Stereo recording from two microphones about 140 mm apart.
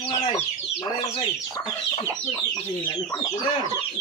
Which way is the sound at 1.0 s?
45° left (ahead or behind).